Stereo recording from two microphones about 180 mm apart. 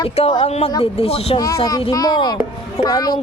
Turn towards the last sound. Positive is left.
turn(degrees=20)  # may be behind; listen again after turning